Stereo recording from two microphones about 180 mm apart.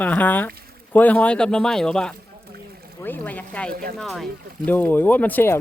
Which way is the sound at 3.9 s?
Centre (ahead or behind).